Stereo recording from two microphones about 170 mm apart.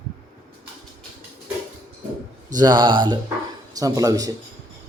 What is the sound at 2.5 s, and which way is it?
Speech, 25° right (ahead or behind).